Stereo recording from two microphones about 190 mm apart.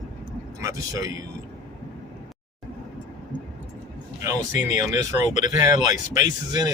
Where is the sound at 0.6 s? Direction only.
15° right (ahead or behind).